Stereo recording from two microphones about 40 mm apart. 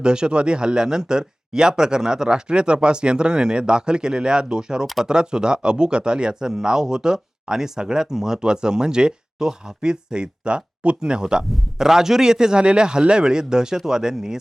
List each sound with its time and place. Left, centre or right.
0.0 s a man's voice: right